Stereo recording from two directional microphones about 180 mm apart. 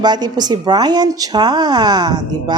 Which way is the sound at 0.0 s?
25° right (ahead or behind).